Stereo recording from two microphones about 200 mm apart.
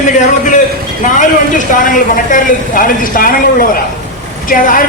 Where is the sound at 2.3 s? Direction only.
45° left (ahead or behind).